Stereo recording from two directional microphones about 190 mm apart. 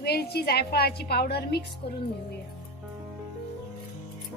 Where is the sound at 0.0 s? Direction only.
55° left (ahead or behind).